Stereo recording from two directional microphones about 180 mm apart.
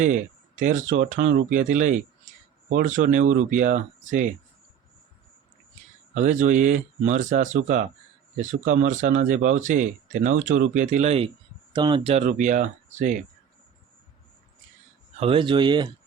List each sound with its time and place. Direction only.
0.0 s speech: 45° right (ahead or behind)
6.1 s speech: 45° right (ahead or behind)
11.7 s speech: 25° right (ahead or behind); by 13.1 s 45° right (ahead or behind)
15.2 s speech: 30° right (ahead or behind)